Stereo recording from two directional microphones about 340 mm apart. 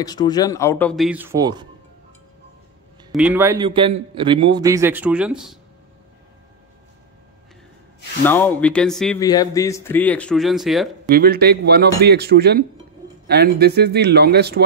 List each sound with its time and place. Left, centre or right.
0.0 s speech: centre
3.1 s a man's voice: centre
8.3 s speech: centre
11.1 s speech: right